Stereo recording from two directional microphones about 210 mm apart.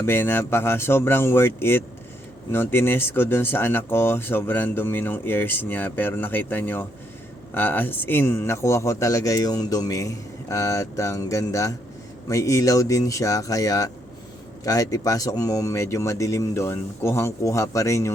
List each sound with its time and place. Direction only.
0.0 s speech: 10° left (ahead or behind)